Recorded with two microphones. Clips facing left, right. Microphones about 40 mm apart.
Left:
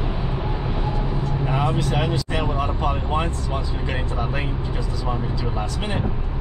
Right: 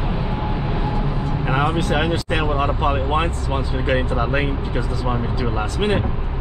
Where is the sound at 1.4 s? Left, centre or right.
Right.